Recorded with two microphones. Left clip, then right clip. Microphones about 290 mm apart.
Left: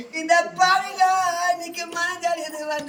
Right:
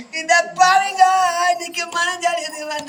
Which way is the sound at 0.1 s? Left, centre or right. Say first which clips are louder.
Right 3 dB; centre.